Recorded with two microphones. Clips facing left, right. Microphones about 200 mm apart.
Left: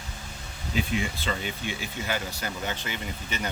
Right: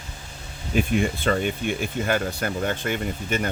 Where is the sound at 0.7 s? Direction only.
55° right (ahead or behind).